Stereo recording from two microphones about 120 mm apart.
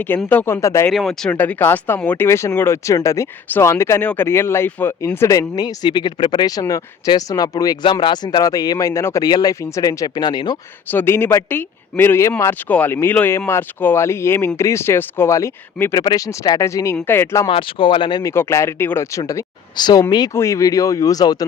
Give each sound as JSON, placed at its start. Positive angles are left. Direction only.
{"t": 0.3, "sound": "speech", "side_deg": 15}
{"t": 0.9, "sound": "speech", "side_deg": 5}
{"t": 1.3, "sound": "speech", "side_deg": 15}
{"t": 10.9, "sound": "speech", "side_deg": 20}
{"t": 17.4, "sound": "speech", "side_deg": 45}
{"t": 18.2, "sound": "speech", "side_deg": 25}
{"t": 19.3, "sound": "speech", "side_deg": 30}